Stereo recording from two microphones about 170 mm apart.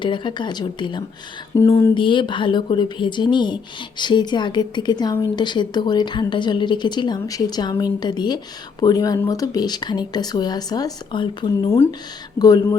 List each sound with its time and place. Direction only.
0.0 s speech: 30° left (ahead or behind)
11.7 s speech: 15° left (ahead or behind)